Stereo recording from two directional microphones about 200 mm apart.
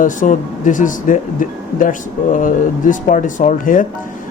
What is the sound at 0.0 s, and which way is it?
A man's voice, 40° left (ahead or behind).